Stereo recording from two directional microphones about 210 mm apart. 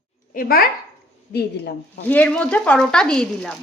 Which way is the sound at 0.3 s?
45° left (ahead or behind).